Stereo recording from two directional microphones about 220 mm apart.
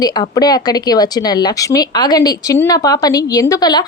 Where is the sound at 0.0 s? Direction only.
15° left (ahead or behind).